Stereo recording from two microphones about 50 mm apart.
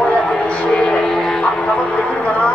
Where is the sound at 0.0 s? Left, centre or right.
Centre.